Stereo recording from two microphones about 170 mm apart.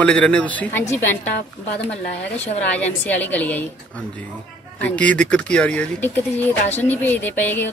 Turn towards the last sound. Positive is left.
turn(degrees=10)  # may be behind; listen again after turning